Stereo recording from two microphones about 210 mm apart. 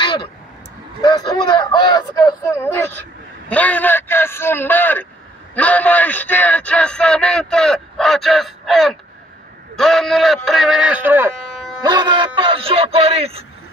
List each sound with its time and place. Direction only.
0.0 s vehicle: 20° left (ahead or behind)
1.0 s a man's voice: 20° left (ahead or behind); by 13.5 s 30° right (ahead or behind)